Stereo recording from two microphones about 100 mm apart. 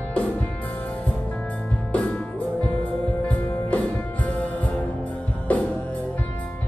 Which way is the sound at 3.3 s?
15° left (ahead or behind).